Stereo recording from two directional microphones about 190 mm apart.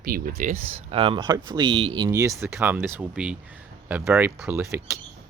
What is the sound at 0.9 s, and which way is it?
Speech, 30° right (ahead or behind).